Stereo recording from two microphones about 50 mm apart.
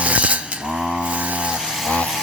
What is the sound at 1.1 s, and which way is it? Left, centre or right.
Vehicle, right.